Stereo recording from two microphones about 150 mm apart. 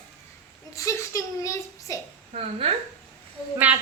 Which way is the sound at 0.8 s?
20° left (ahead or behind).